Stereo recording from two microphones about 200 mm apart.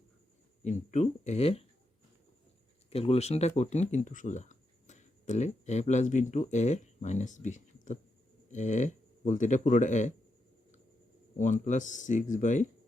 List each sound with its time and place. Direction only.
0.6 s speech: 35° left (ahead or behind)
2.9 s speech: 30° left (ahead or behind)
11.3 s speech: 40° left (ahead or behind)